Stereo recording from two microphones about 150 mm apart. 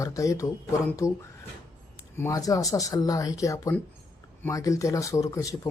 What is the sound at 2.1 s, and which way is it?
Speech, 20° left (ahead or behind).